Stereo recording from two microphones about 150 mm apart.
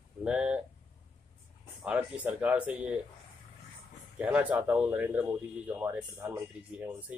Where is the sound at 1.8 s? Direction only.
10° right (ahead or behind).